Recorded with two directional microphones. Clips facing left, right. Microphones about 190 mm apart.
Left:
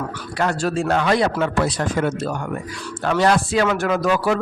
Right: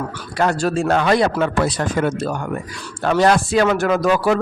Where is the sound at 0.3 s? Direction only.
40° right (ahead or behind).